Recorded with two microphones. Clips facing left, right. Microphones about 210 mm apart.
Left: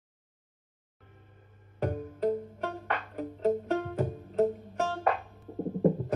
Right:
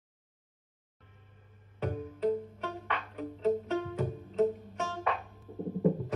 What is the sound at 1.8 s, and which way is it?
Music, 45° left (ahead or behind).